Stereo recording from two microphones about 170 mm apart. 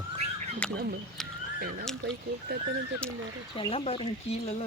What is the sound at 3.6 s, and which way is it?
Speech, 35° left (ahead or behind).